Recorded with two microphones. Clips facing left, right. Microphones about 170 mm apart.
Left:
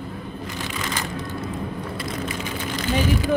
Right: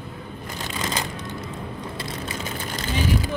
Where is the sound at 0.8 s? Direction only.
30° right (ahead or behind).